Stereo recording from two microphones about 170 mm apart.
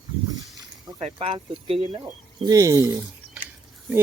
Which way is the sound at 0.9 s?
35° right (ahead or behind).